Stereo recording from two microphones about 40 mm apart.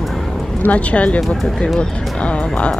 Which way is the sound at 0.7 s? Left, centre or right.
Left.